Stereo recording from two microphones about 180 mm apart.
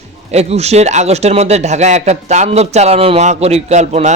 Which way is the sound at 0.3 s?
35° right (ahead or behind).